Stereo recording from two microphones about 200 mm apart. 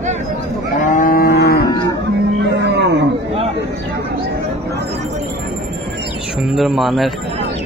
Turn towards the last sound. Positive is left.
turn(degrees=0)  # may be behind; listen again after turning